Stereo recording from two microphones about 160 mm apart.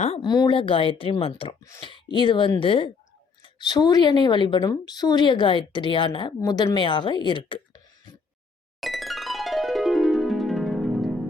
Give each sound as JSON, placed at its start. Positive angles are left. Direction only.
{"t": 0.2, "sound": "a woman's voice", "side_deg": 25}
{"t": 8.8, "sound": "music", "side_deg": 0}